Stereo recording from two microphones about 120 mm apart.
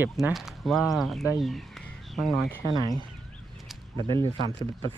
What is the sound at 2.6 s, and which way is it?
Speech, 30° right (ahead or behind).